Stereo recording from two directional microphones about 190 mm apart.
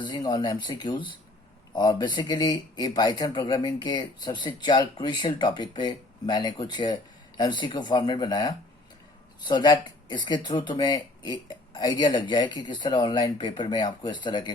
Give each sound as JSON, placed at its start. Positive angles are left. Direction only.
{"t": 0.0, "sound": "speech", "side_deg": 20}